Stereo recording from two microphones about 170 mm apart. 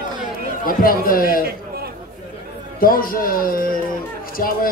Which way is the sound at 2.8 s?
55° left (ahead or behind).